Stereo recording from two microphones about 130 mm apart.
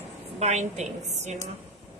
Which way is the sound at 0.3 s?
60° right (ahead or behind).